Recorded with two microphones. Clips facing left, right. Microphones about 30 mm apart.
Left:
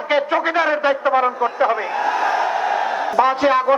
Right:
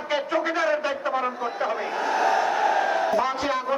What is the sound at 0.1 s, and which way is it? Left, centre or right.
A man's voice, left.